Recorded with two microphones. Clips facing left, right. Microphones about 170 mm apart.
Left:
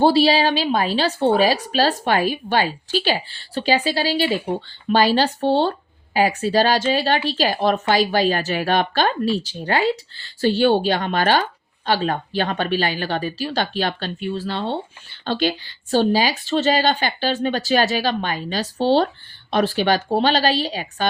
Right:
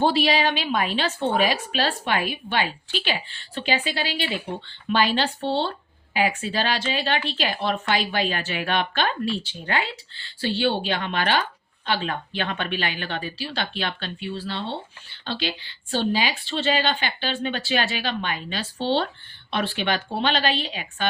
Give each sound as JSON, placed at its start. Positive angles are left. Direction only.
{"t": 0.0, "sound": "speech", "side_deg": 30}